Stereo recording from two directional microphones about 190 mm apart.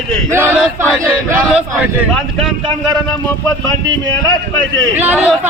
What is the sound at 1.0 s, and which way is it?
Battle cry, 10° right (ahead or behind).